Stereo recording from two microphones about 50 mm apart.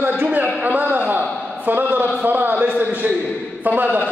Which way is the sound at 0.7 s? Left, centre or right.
Right.